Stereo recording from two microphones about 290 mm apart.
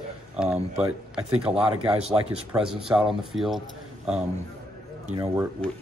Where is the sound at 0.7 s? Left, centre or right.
Centre.